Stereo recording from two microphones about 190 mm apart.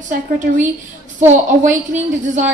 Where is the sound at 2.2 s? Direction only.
40° right (ahead or behind).